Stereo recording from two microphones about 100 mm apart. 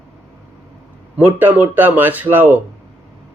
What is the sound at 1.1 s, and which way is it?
Speech, 20° right (ahead or behind).